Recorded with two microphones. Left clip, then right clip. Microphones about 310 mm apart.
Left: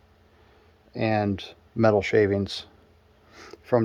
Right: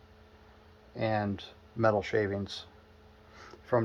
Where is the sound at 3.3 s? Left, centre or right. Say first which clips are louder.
Left 6 dB; left.